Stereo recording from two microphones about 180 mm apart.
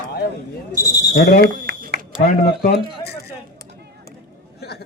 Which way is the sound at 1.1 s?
65° left (ahead or behind).